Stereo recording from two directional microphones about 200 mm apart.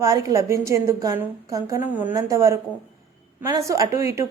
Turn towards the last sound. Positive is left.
turn(degrees=-15)  # may be behind; listen again after turning